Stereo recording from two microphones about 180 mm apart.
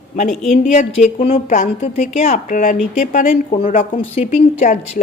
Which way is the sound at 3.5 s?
35° left (ahead or behind).